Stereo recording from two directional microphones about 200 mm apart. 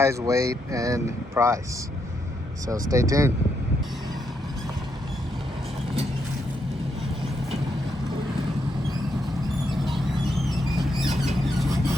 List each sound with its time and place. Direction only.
0.0 s speech: 15° right (ahead or behind)
2.6 s speech: 15° right (ahead or behind)